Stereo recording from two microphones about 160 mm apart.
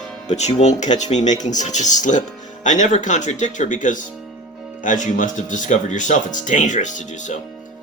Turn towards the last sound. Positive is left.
turn(degrees=50)  # may be behind; listen again after turning